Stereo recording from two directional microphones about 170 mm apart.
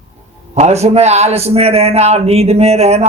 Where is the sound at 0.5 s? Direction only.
40° right (ahead or behind).